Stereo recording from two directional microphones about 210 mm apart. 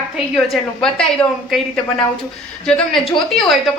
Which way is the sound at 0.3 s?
Centre (ahead or behind).